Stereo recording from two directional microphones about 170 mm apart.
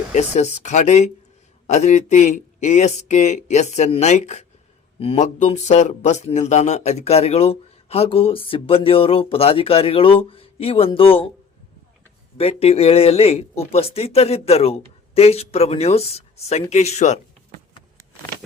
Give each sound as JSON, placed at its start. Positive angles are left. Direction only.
{"t": 0.1, "sound": "speech", "side_deg": 40}
{"t": 12.4, "sound": "speech", "side_deg": 35}